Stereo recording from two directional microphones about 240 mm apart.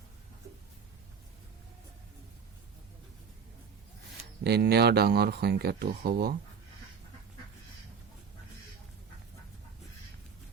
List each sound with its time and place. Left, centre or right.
4.4 s speech: right